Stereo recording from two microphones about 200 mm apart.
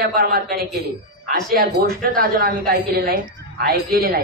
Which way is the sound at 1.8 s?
45° right (ahead or behind).